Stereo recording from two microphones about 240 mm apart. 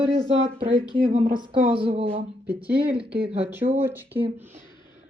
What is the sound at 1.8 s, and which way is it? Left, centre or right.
Speech, right.